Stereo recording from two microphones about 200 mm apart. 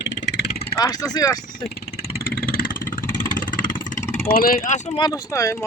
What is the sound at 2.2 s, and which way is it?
Vehicle, 50° left (ahead or behind).